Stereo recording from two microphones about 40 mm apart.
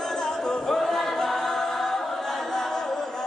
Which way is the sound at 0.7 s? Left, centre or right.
Centre.